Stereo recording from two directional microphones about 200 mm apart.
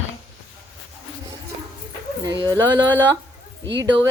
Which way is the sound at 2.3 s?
20° right (ahead or behind).